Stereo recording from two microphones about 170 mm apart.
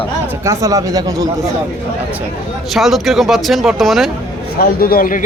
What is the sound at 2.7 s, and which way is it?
A man's voice, centre (ahead or behind).